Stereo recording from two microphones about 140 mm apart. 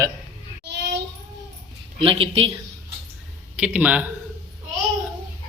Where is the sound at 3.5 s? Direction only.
10° right (ahead or behind).